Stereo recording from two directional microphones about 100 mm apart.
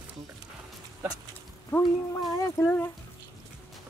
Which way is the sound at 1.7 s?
20° left (ahead or behind).